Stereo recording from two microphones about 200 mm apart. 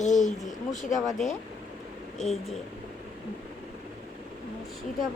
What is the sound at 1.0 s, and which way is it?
Speech, centre (ahead or behind).